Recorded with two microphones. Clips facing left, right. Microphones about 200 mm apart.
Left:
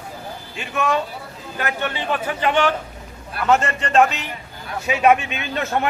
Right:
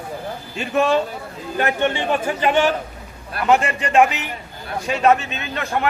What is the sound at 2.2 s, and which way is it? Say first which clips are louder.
A man's voice: right 1 dB; 10° right (ahead or behind).